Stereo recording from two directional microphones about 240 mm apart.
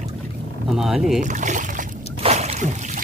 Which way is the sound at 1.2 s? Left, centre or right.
Right.